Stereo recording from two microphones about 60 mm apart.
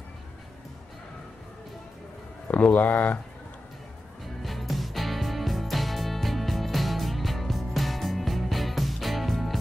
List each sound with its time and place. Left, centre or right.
2.4 s speech: left
4.4 s music: centre